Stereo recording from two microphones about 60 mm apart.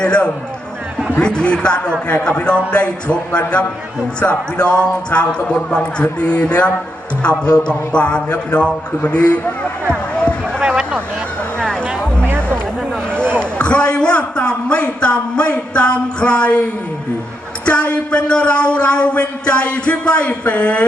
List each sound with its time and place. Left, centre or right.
0.0 s a man's voice: centre
10.6 s a sound: centre
11.6 s music: centre
13.4 s a man's voice: centre
17.7 s a man's voice: centre